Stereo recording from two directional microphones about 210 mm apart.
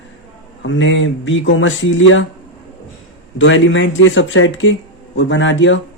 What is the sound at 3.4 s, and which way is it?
Speech, 65° left (ahead or behind).